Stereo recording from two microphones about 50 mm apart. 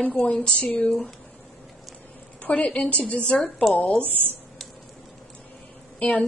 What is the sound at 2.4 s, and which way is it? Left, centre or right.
A woman's voice, left.